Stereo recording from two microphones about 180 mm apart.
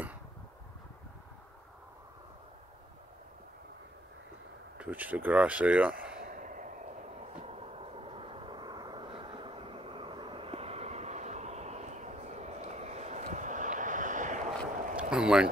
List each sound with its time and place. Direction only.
4.7 s speech: 10° right (ahead or behind)
6.2 s train: 50° right (ahead or behind)
15.0 s a sound: 5° right (ahead or behind)